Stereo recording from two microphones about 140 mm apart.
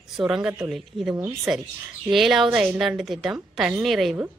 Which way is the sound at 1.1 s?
15° right (ahead or behind).